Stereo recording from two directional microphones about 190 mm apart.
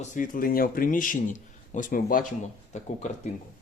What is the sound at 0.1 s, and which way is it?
Speech, 45° left (ahead or behind).